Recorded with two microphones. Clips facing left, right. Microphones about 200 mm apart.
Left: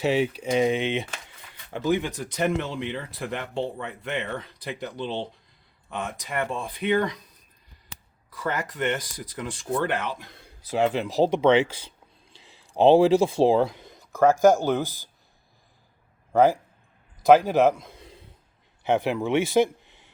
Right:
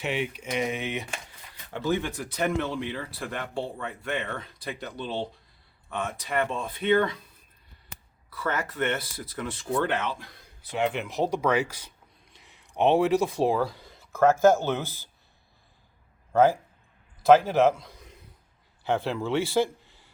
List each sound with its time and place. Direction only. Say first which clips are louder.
0.0 s speech: left 7 dB; 35° left (ahead or behind); by 7.2 s 15° left (ahead or behind)
8.3 s speech: left 1 dB; 15° left (ahead or behind)
10.7 s speech: left 4 dB; 35° left (ahead or behind); by 15.1 s 15° left (ahead or behind)
16.3 s a man's voice: left 1 dB; 15° left (ahead or behind)
18.8 s speech: left 4 dB; 20° left (ahead or behind)